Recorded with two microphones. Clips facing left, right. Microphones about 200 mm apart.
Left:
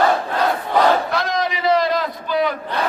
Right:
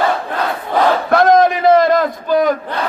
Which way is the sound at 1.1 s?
50° right (ahead or behind).